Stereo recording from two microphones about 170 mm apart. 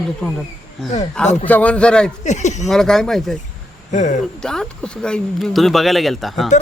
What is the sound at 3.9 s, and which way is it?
Speech, 45° left (ahead or behind).